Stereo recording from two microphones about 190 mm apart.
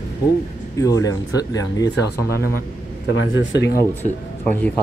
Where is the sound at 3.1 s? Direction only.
85° left.